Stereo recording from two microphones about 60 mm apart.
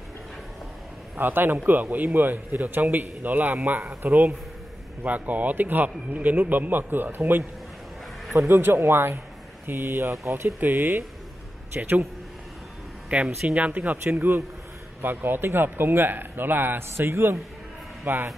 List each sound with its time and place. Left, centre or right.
1.1 s speech: right
5.0 s speech: right
8.4 s speech: right
10.3 s speech: right
13.1 s speech: right